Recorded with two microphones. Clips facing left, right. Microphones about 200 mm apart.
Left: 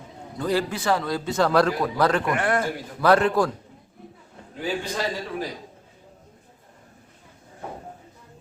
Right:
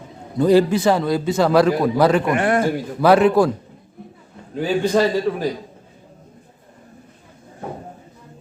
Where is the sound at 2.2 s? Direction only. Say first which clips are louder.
Right 6 dB; 20° right (ahead or behind).